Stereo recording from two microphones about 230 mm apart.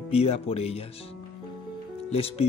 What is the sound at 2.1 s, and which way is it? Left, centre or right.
Speech, left.